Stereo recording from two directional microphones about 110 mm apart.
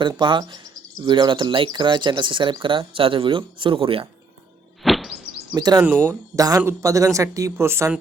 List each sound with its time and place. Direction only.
0.2 s speech: 45° right (ahead or behind)
4.8 s a sound: centre (ahead or behind)
5.5 s speech: 40° right (ahead or behind)